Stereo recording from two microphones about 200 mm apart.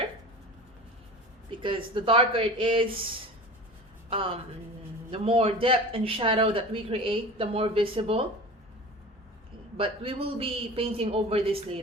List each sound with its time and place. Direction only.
1.5 s speech: 25° right (ahead or behind)
5.1 s speech: 30° right (ahead or behind)
9.7 s speech: 30° right (ahead or behind)